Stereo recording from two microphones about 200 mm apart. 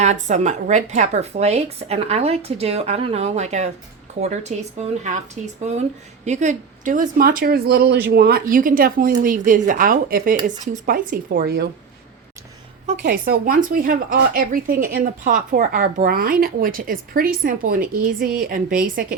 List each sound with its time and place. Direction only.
0.0 s speech: 35° right (ahead or behind)
12.8 s a woman's voice: 35° right (ahead or behind)
13.1 s speech: 45° right (ahead or behind)